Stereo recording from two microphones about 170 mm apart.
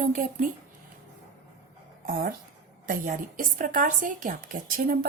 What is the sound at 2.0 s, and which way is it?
Speech, 60° right (ahead or behind).